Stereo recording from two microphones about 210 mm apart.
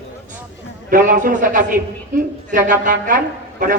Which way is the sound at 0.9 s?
40° right (ahead or behind).